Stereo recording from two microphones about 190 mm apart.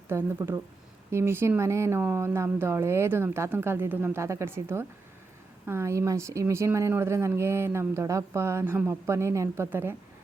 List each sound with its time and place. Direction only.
0.1 s speech: 10° right (ahead or behind)